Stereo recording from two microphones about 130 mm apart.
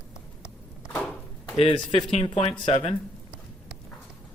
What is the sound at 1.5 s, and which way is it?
Speech, 40° left (ahead or behind).